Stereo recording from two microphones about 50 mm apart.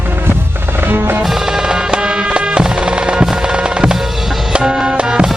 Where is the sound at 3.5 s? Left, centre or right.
Centre.